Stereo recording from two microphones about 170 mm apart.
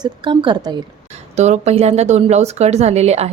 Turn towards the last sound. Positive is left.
turn(degrees=-40)  # may be behind; listen again after turning